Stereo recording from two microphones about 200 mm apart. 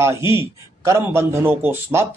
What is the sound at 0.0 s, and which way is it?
Speech, 15° right (ahead or behind).